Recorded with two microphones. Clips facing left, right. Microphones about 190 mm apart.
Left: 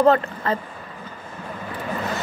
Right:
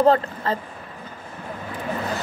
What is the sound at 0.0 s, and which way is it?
Speech, 30° right (ahead or behind).